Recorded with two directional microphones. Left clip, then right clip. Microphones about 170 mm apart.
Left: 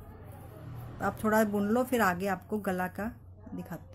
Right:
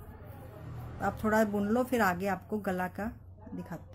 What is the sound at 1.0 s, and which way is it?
A woman's voice, 15° left (ahead or behind).